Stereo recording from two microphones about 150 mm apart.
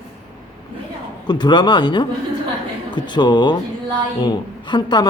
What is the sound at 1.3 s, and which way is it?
Speech, 30° left (ahead or behind).